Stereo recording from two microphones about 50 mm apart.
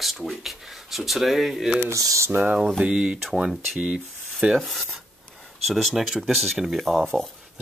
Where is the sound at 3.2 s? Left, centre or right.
Centre.